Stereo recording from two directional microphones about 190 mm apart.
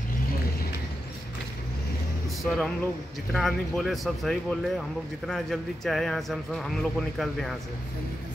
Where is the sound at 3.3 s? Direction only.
Centre (ahead or behind).